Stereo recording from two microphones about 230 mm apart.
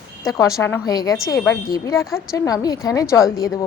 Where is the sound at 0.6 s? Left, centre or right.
Centre.